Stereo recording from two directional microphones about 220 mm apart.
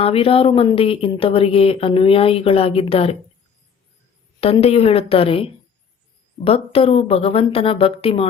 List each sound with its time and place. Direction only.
0.0 s speech: 25° left (ahead or behind)
4.4 s speech: 25° left (ahead or behind)